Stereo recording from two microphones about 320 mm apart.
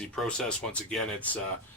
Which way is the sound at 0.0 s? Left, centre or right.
Centre.